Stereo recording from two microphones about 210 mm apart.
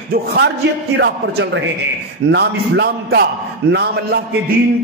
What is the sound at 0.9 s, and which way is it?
A man's voice, 55° right (ahead or behind).